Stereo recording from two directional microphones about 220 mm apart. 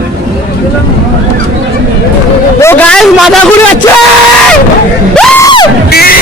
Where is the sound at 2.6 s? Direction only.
10° left (ahead or behind).